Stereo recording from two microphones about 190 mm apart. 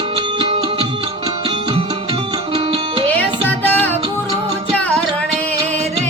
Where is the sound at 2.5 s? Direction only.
30° right (ahead or behind).